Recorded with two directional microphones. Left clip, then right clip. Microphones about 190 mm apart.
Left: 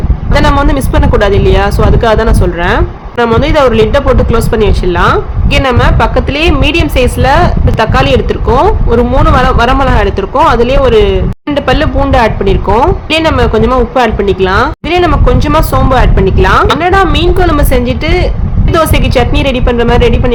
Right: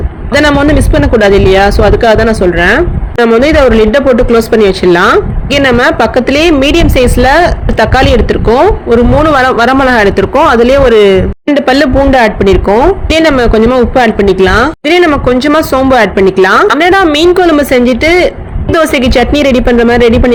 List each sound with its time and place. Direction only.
0.3 s a woman's voice: 15° right (ahead or behind)